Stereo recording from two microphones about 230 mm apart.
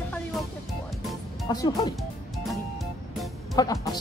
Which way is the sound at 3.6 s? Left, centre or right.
Centre.